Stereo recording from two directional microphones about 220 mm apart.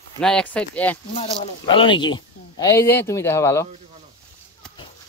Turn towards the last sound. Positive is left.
turn(degrees=10)  # may be behind; listen again after turning